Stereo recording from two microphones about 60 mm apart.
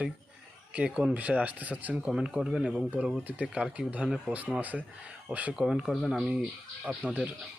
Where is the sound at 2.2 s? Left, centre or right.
Centre.